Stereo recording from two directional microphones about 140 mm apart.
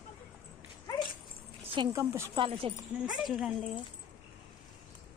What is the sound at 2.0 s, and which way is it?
Speech, 20° right (ahead or behind).